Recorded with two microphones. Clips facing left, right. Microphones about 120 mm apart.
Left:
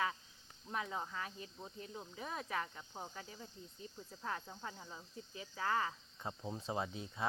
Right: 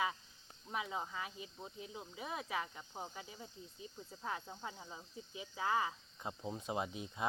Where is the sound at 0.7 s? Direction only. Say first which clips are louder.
Even; 10° right (ahead or behind).